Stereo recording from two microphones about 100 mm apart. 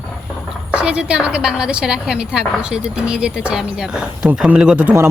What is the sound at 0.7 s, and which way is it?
A woman's voice, 10° right (ahead or behind).